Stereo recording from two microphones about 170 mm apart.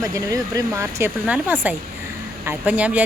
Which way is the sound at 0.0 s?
20° right (ahead or behind).